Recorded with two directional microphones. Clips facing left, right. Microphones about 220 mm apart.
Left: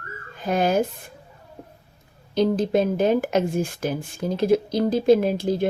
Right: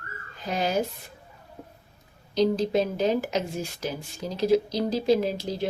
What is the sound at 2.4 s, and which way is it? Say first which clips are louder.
Speech: left 3 dB; 50° left (ahead or behind).